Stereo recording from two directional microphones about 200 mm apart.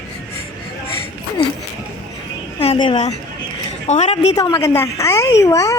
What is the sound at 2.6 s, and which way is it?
Speech, 25° left (ahead or behind).